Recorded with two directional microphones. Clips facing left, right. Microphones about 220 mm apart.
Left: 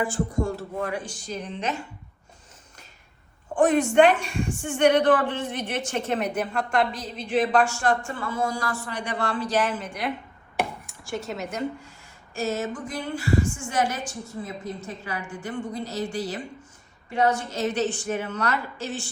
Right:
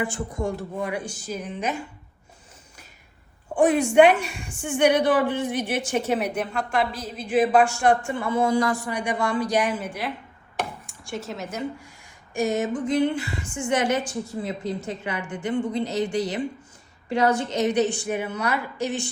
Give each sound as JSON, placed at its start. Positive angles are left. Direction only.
{"t": 0.1, "sound": "a woman's voice", "side_deg": -15}
{"t": 3.5, "sound": "a woman's voice", "side_deg": -10}
{"t": 10.6, "sound": "dishes", "side_deg": 0}
{"t": 12.3, "sound": "a woman's voice", "side_deg": -15}
{"t": 14.6, "sound": "a woman's voice", "side_deg": -85}
{"t": 15.4, "sound": "speech", "side_deg": -20}
{"t": 17.5, "sound": "a woman's voice", "side_deg": -15}